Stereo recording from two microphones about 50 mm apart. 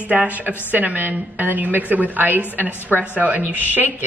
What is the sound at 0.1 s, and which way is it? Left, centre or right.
A woman's voice, right.